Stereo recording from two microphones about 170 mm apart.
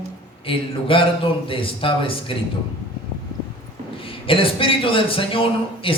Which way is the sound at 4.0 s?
30° left (ahead or behind).